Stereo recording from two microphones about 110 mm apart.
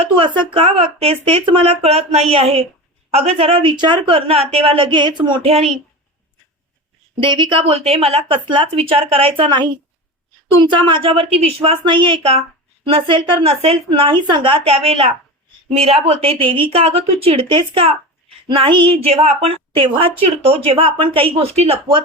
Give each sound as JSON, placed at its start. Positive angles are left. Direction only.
{"t": 0.0, "sound": "a woman's voice", "side_deg": -50}
{"t": 2.3, "sound": "a woman's voice", "side_deg": -60}
{"t": 3.1, "sound": "a woman's voice", "side_deg": -70}
{"t": 5.4, "sound": "a woman's voice", "side_deg": -65}
{"t": 7.2, "sound": "a woman's voice", "side_deg": -45}
{"t": 7.7, "sound": "a woman's voice", "side_deg": -65}
{"t": 11.8, "sound": "a woman's voice", "side_deg": -50}